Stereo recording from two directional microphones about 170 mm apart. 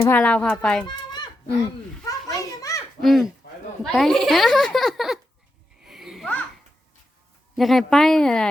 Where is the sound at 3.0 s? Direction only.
Centre (ahead or behind).